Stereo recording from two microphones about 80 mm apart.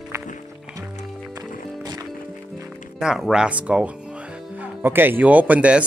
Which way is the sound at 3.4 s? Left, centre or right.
Centre.